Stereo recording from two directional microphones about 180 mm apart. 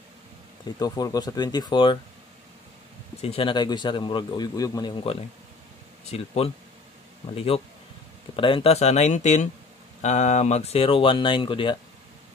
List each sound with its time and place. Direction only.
0.7 s a man's voice: 20° left (ahead or behind)
3.2 s a man's voice: 30° left (ahead or behind)
6.0 s speech: 35° left (ahead or behind)